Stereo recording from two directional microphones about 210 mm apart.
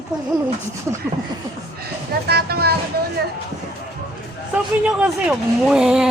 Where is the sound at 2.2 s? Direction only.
50° right (ahead or behind).